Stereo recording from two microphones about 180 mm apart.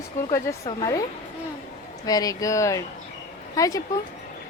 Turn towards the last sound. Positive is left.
turn(degrees=20)  # may be behind; listen again after turning